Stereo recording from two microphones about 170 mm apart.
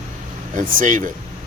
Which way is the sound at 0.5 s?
50° right (ahead or behind).